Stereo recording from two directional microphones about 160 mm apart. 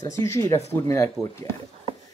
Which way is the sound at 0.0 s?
20° left (ahead or behind).